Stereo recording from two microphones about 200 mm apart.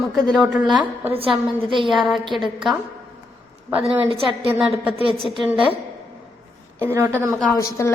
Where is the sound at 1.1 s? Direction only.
25° right (ahead or behind).